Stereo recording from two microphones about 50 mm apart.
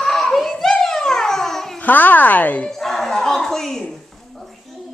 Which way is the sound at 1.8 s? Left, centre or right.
Left.